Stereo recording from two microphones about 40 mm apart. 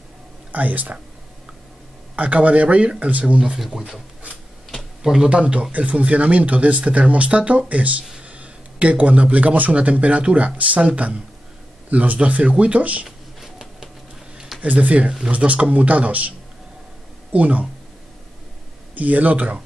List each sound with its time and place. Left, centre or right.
0.5 s speech: right
2.1 s speech: right
3.5 s speech: centre
5.0 s speech: centre
5.3 s speech: right
13.0 s a sound: centre
14.6 s speech: right
18.9 s speech: right